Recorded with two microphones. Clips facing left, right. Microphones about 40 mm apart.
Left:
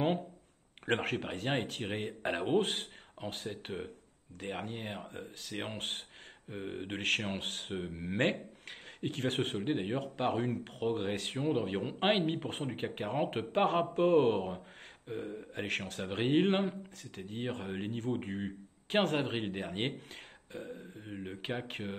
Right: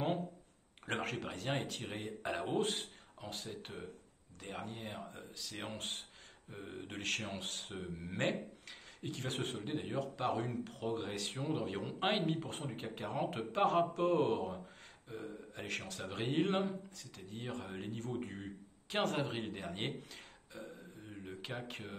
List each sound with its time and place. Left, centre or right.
0.8 s speech: left
7.7 s speech: left
21.1 s speech: left